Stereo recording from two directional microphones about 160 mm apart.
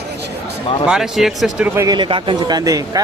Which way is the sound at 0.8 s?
5° right (ahead or behind).